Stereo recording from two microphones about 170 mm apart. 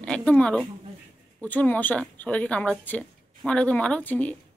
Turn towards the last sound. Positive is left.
turn(degrees=10)  # may be behind; listen again after turning